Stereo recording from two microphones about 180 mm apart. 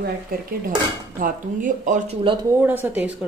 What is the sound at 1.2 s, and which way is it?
Speech, 45° right (ahead or behind).